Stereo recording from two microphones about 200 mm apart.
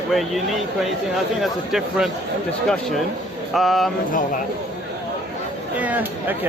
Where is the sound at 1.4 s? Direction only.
Centre (ahead or behind).